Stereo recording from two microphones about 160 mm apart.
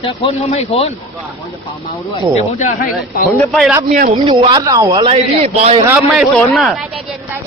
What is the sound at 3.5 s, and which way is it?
Speech, centre (ahead or behind).